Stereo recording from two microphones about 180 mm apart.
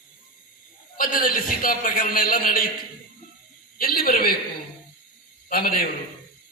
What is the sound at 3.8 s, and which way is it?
Speech, 55° left (ahead or behind).